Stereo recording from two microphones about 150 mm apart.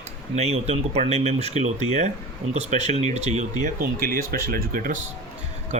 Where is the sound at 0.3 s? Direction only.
45° right (ahead or behind).